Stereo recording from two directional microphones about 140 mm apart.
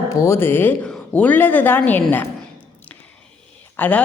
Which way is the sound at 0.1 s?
20° left (ahead or behind).